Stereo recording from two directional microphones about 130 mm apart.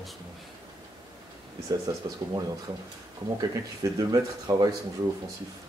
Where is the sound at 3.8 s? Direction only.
30° right (ahead or behind).